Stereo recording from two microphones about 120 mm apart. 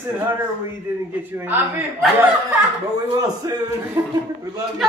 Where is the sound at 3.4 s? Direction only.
25° right (ahead or behind).